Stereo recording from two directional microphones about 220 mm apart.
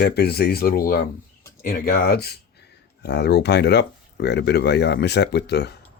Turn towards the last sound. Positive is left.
turn(degrees=50)  # may be behind; listen again after turning